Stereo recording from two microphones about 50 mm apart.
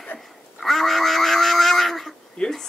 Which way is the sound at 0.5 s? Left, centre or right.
Centre.